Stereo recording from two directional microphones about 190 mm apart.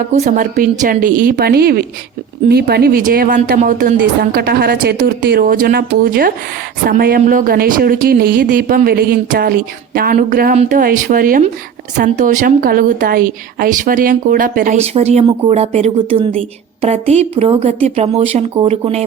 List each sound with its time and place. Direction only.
0.1 s speech: 45° right (ahead or behind)